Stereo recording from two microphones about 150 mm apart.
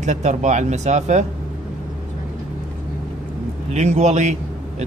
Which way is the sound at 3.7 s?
50° right (ahead or behind).